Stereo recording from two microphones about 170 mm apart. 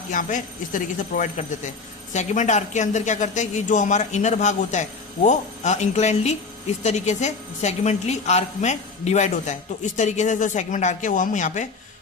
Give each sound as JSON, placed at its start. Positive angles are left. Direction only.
{"t": 0.1, "sound": "a woman's voice", "side_deg": 50}